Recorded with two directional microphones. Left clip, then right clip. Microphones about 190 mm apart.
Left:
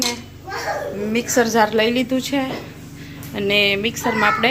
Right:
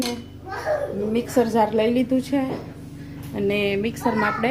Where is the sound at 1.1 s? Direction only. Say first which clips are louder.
Left 4 dB; 10° right (ahead or behind).